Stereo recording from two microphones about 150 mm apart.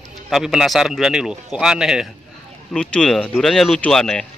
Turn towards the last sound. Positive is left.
turn(degrees=5)  # may be behind; listen again after turning